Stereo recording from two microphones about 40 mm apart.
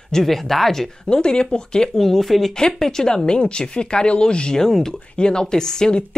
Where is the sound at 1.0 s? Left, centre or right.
Left.